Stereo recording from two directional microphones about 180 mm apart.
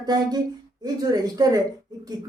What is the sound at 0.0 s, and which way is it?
Speech, 20° right (ahead or behind).